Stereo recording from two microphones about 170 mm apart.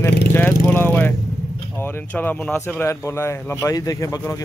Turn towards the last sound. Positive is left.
turn(degrees=20)  # may be behind; listen again after turning